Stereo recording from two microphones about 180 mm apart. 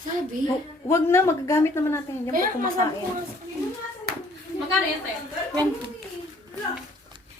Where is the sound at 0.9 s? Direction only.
15° left (ahead or behind).